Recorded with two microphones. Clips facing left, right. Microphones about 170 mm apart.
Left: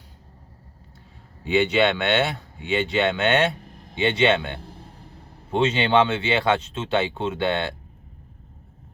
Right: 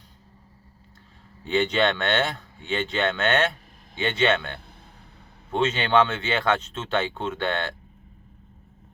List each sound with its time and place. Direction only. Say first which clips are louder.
1.5 s speech: left 3 dB; 10° left (ahead or behind)
4.6 s a sound: left 8 dB; 35° left (ahead or behind)
5.5 s speech: left 2 dB; 15° left (ahead or behind)